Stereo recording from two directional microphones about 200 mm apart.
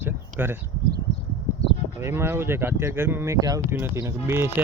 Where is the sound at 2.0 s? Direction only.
10° right (ahead or behind).